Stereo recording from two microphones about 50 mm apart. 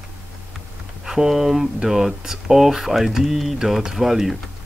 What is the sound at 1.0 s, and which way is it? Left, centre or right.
Speech, centre.